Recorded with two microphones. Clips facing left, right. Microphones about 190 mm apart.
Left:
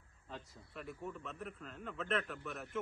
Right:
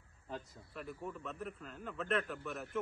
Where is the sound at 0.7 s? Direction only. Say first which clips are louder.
Right 1 dB; centre (ahead or behind).